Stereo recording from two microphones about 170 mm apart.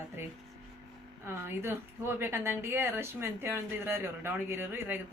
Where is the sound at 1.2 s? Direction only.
15° right (ahead or behind).